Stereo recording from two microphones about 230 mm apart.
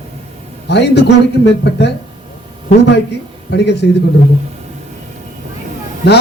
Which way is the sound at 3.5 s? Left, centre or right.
Left.